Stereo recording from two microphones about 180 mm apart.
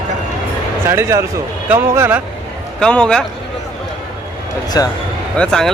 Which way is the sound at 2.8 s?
5° left (ahead or behind).